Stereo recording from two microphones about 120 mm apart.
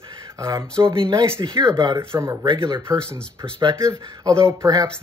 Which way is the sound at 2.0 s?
20° right (ahead or behind).